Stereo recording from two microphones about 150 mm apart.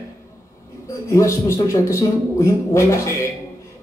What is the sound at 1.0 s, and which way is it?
A man's voice, 20° left (ahead or behind).